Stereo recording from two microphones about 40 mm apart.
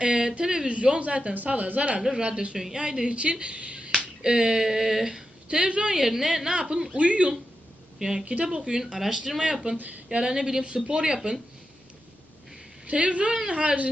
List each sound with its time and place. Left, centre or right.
0.0 s speech: right
0.7 s speech: right
2.0 s speech: centre
2.2 s a woman's voice: right
3.4 s finger snapping: right
4.2 s speech: centre
5.9 s speech: centre; by 7.3 s right
7.9 s a woman's voice: centre
9.0 s speech: centre
9.7 s speech: right
10.1 s a woman's voice: centre
12.9 s a woman's voice: right